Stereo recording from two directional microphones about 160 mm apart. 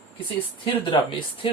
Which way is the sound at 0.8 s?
30° left (ahead or behind).